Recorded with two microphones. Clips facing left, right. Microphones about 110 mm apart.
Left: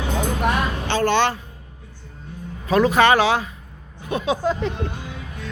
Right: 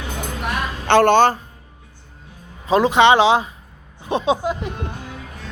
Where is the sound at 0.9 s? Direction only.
60° right (ahead or behind).